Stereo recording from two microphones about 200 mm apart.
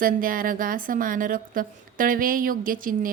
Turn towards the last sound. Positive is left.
turn(degrees=-45)  # may be behind; listen again after turning